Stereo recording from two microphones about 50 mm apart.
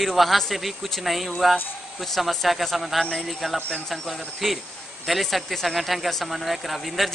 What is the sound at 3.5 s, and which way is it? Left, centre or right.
Speech, left.